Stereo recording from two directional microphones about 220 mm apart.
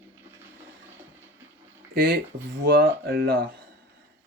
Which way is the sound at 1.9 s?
45° right (ahead or behind).